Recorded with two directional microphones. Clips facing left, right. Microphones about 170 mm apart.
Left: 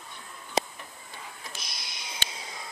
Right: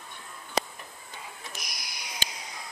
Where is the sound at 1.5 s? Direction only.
25° left (ahead or behind).